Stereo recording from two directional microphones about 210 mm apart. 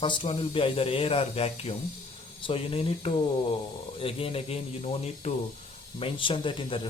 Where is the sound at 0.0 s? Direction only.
25° left (ahead or behind).